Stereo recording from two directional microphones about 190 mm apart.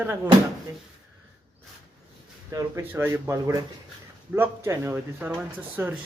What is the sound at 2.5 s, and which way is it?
Speech, 15° right (ahead or behind).